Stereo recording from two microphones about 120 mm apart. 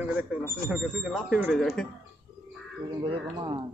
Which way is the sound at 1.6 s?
5° left (ahead or behind).